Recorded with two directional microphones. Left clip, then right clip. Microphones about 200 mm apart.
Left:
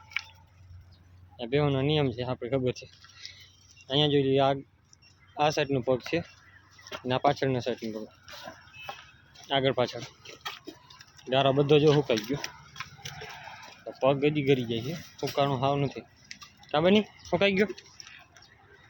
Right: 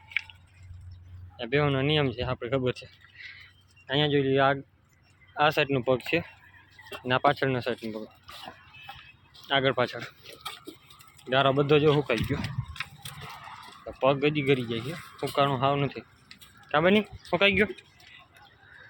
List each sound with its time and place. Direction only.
1.4 s speech: 5° left (ahead or behind)
9.3 s a sound: 10° left (ahead or behind)
11.3 s speech: 10° left (ahead or behind)
13.8 s speech: 10° left (ahead or behind)